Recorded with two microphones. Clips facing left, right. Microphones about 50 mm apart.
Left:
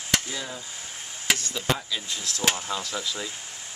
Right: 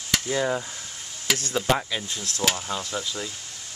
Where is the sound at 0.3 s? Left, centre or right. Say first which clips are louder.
Right 10 dB; right.